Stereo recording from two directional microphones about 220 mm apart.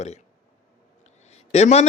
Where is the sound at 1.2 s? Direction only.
30° left (ahead or behind).